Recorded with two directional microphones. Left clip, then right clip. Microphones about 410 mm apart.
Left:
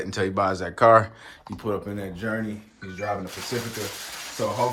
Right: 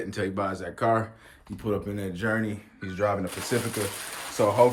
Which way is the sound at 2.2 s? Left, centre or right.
Centre.